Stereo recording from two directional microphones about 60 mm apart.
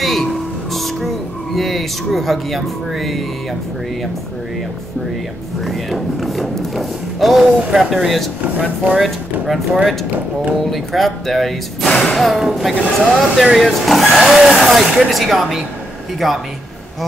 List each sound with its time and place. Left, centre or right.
0.0 s music: centre
5.6 s speech: centre
8.5 s speech: right
8.9 s speech: centre
10.6 s speech: centre